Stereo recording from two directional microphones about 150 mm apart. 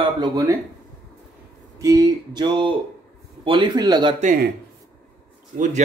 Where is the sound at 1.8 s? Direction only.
25° right (ahead or behind).